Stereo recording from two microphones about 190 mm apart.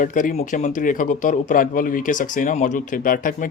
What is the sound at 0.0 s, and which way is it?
Speech, 45° left (ahead or behind).